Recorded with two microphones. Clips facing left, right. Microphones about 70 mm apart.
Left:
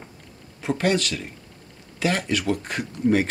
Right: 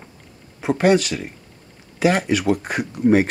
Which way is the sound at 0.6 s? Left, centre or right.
Centre.